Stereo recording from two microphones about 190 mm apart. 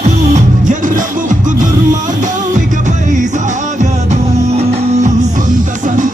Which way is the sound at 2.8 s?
40° right (ahead or behind).